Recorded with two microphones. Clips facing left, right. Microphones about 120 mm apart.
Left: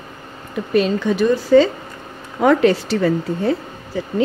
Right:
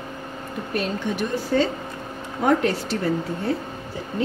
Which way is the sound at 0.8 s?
90° left.